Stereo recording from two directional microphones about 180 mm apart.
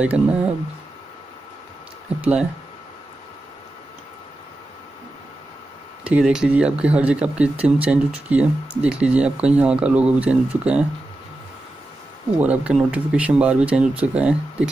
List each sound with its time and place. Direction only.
0.0 s speech: 5° right (ahead or behind)
6.0 s speech: 5° right (ahead or behind)
12.4 s speech: 5° right (ahead or behind)